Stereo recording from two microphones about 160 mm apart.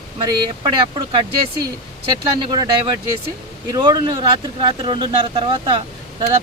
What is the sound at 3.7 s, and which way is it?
Speech, 25° right (ahead or behind).